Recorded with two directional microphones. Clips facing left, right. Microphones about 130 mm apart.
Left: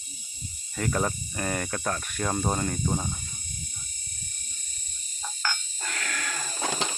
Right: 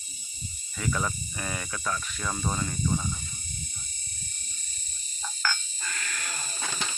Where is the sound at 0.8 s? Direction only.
45° left (ahead or behind).